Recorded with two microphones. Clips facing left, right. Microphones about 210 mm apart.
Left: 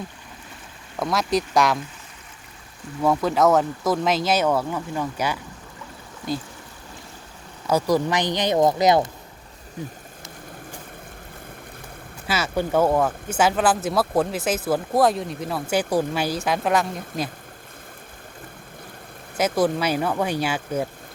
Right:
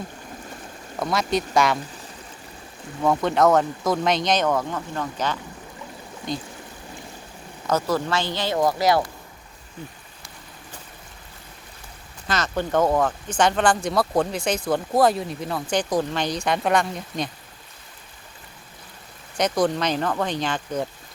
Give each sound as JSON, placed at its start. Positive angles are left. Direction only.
{"t": 0.9, "sound": "speech", "side_deg": 0}
{"t": 3.0, "sound": "speech", "side_deg": 0}
{"t": 7.7, "sound": "speech", "side_deg": 15}
{"t": 12.3, "sound": "speech", "side_deg": 10}
{"t": 19.4, "sound": "speech", "side_deg": 5}